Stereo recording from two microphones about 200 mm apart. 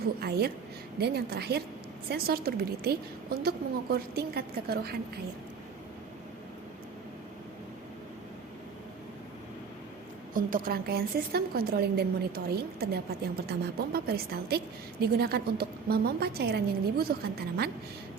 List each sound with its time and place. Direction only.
0.2 s a woman's voice: 50° right (ahead or behind)
10.3 s a woman's voice: 45° right (ahead or behind)